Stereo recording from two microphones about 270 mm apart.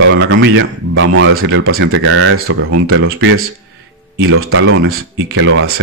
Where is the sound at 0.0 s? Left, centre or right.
Right.